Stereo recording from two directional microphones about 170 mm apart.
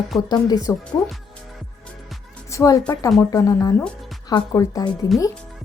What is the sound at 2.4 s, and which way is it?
Music, 20° left (ahead or behind).